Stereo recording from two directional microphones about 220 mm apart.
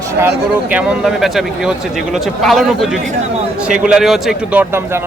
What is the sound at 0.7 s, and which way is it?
Speech, 5° right (ahead or behind).